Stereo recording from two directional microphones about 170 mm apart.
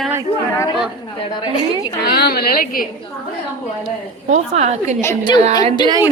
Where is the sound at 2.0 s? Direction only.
70° left (ahead or behind).